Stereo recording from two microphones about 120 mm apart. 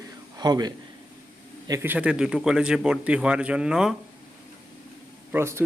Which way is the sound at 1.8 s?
10° right (ahead or behind).